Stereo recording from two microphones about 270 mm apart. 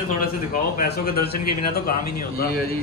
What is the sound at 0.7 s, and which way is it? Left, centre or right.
A man's voice, left.